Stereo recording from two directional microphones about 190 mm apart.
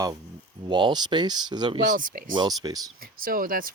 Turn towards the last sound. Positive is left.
turn(degrees=-50)  # may be behind; listen again after turning